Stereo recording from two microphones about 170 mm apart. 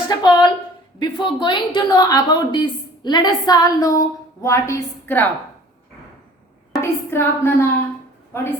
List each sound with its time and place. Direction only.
0.1 s a woman's voice: 25° left (ahead or behind)
6.8 s speech: 15° left (ahead or behind)